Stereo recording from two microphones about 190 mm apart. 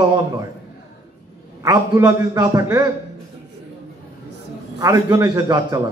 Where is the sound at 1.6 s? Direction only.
15° right (ahead or behind).